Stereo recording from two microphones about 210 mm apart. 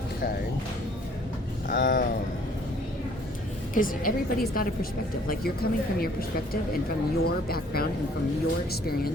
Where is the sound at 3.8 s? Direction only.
40° left (ahead or behind).